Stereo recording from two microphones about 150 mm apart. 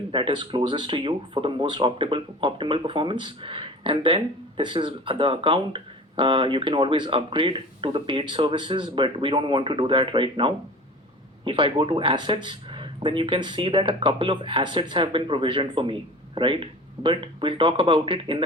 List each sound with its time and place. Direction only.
0.1 s speech: 35° right (ahead or behind)